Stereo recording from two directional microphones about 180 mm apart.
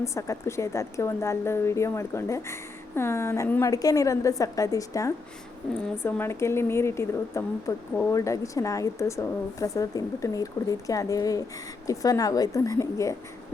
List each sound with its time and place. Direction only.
0.0 s a woman's voice: 15° left (ahead or behind)